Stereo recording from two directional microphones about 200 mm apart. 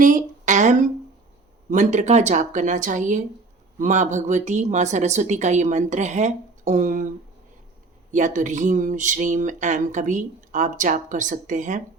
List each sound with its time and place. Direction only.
0.0 s a sound: 40° right (ahead or behind)
1.7 s speech: 35° right (ahead or behind)
8.1 s speech: 40° right (ahead or behind)